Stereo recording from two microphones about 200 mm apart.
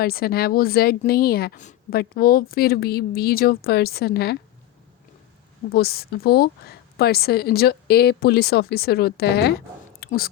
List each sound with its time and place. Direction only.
0.0 s a woman's voice: 50° left (ahead or behind)
5.7 s a woman's voice: 50° left (ahead or behind)
10.0 s a sound: 50° left (ahead or behind)